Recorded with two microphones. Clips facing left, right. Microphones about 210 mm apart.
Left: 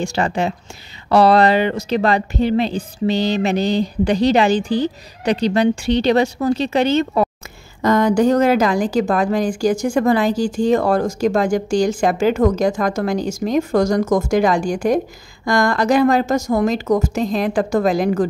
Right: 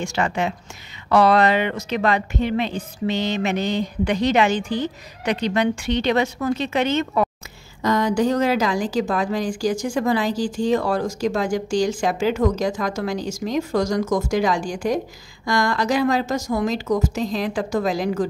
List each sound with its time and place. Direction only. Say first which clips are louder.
0.0 s speech: left 3 dB; 35° left (ahead or behind)
7.8 s a woman's voice: left 5 dB; 50° left (ahead or behind)